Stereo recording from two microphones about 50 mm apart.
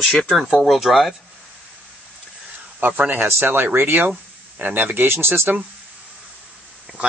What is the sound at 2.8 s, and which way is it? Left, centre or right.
Speech, right.